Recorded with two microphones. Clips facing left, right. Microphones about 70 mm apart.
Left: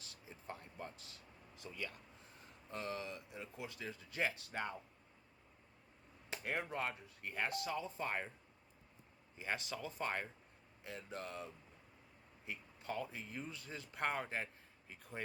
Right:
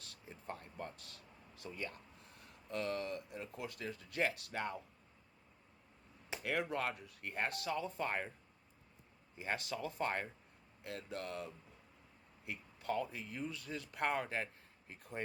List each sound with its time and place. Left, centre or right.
0.0 s a sound: right
2.4 s speech: right
6.4 s speech: right
9.4 s speech: right
10.8 s speech: right